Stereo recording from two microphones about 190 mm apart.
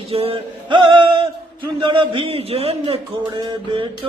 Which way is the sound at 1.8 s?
25° right (ahead or behind).